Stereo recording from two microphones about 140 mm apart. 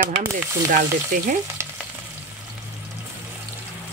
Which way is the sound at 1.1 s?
75° right (ahead or behind).